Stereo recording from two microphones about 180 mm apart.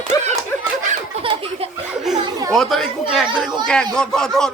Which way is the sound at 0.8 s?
30° right (ahead or behind).